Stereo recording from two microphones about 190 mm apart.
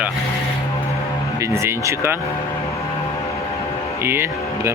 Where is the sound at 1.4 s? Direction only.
15° right (ahead or behind).